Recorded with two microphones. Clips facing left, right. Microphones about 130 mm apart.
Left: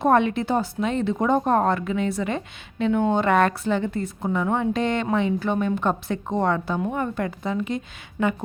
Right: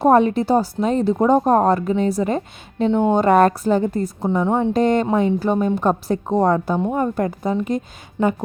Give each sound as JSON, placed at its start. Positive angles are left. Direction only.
{"t": 0.0, "sound": "a woman's voice", "side_deg": -35}
{"t": 2.9, "sound": "speech", "side_deg": -20}
{"t": 3.2, "sound": "a woman's voice", "side_deg": -40}
{"t": 4.7, "sound": "a woman's voice", "side_deg": -40}
{"t": 8.2, "sound": "speech", "side_deg": -25}